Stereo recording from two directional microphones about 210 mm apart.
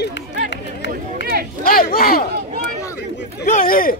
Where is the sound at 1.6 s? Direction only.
45° left (ahead or behind).